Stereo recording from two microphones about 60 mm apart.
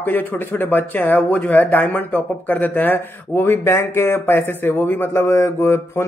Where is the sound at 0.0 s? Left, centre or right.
Left.